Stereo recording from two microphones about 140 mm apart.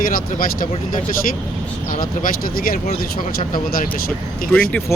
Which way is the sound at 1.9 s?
85° left.